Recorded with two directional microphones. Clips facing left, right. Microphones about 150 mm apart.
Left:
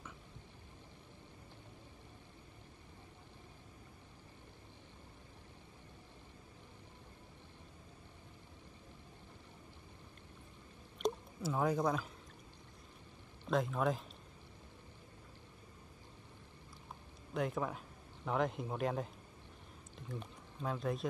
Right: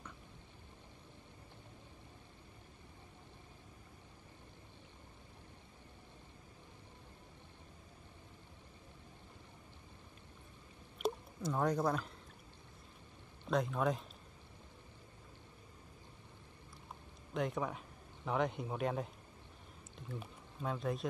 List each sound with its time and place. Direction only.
11.0 s a sound: 5° right (ahead or behind)
11.4 s speech: 5° left (ahead or behind)
13.5 s speech: centre (ahead or behind)
17.3 s speech: centre (ahead or behind)